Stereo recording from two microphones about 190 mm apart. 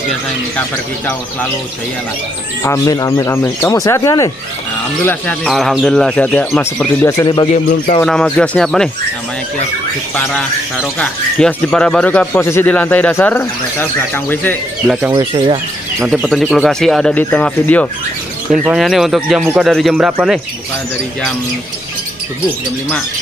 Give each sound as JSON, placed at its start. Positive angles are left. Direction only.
{"t": 2.6, "sound": "speech", "side_deg": 15}
{"t": 8.0, "sound": "speech", "side_deg": 5}
{"t": 10.1, "sound": "speech", "side_deg": 5}
{"t": 14.9, "sound": "speech", "side_deg": -10}
{"t": 15.3, "sound": "speech", "side_deg": -25}
{"t": 16.1, "sound": "speech", "side_deg": 0}